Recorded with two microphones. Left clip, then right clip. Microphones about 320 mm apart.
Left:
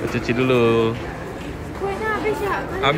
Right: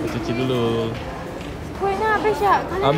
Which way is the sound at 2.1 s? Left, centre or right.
Centre.